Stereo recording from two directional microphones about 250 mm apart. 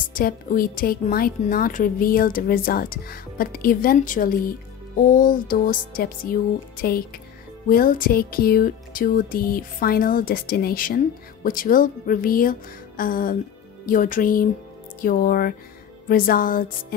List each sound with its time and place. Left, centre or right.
0.0 s a woman's voice: left